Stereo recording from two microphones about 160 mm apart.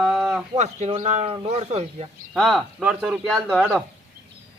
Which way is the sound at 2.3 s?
Centre (ahead or behind).